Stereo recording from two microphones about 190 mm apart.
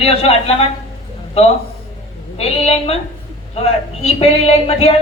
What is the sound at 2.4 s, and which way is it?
Speech, 30° left (ahead or behind).